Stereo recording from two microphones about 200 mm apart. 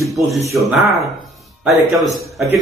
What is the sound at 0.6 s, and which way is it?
Speech, centre (ahead or behind).